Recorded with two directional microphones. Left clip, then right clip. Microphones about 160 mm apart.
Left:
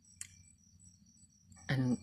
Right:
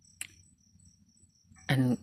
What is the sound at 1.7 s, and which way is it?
Speech, 20° right (ahead or behind).